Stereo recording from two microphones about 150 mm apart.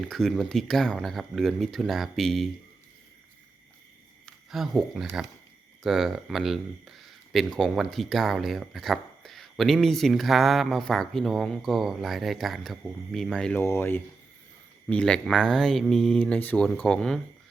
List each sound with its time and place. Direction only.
0.0 s speech: centre (ahead or behind)
4.3 s speech: centre (ahead or behind)
13.6 s speech: 15° left (ahead or behind)